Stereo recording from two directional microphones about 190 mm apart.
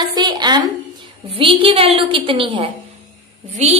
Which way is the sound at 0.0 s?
20° right (ahead or behind).